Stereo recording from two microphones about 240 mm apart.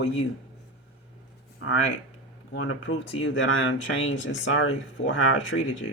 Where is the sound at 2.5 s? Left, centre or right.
Left.